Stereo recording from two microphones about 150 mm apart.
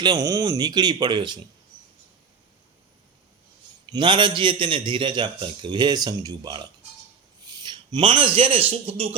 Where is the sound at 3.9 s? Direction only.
30° right (ahead or behind).